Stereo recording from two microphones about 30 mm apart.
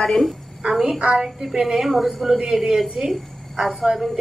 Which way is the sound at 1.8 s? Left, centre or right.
Centre.